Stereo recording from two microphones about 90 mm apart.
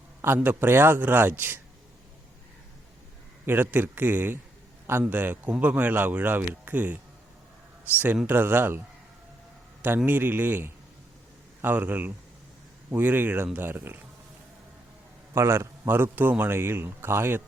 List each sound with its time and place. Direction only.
0.3 s speech: 20° right (ahead or behind)
3.4 s speech: 20° right (ahead or behind)
10.1 s speech: 20° right (ahead or behind)
15.3 s speech: 30° right (ahead or behind)